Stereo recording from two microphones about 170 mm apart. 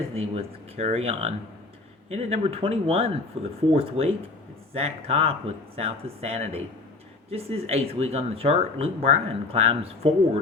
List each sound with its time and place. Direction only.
0.2 s speech: 35° right (ahead or behind)